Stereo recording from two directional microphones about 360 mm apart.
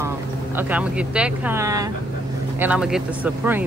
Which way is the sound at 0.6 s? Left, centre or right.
Centre.